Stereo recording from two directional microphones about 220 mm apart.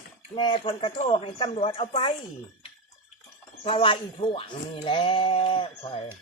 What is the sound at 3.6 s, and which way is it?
Speech, 25° left (ahead or behind).